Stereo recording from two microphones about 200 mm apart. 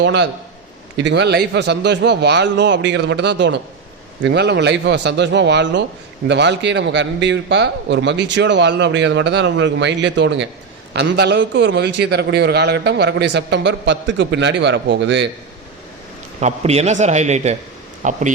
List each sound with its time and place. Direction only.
0.0 s a man's voice: 60° right (ahead or behind)
16.4 s a man's voice: 35° right (ahead or behind)